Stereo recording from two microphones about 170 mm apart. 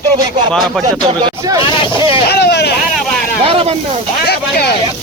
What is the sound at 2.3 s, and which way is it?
Vehicle, 75° left (ahead or behind).